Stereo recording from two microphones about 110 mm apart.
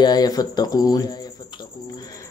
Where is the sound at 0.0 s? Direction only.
35° left (ahead or behind).